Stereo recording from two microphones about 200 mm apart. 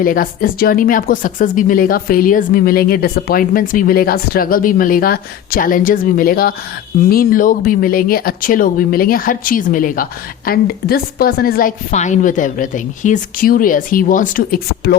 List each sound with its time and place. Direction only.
0.0 s speech: 45° left (ahead or behind)